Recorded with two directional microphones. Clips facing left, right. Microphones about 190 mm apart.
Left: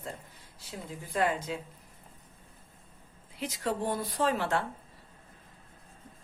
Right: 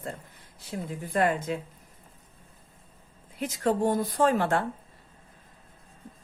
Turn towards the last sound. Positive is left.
turn(degrees=-50)  # may be behind; listen again after turning